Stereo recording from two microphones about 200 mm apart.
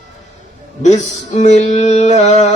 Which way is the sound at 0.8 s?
35° left (ahead or behind).